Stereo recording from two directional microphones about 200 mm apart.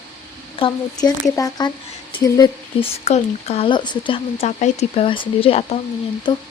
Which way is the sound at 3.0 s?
30° left (ahead or behind).